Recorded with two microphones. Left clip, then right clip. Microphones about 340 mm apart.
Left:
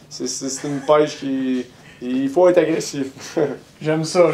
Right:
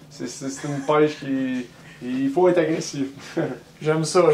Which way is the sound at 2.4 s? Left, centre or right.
Centre.